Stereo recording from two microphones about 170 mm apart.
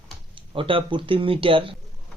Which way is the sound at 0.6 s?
30° right (ahead or behind).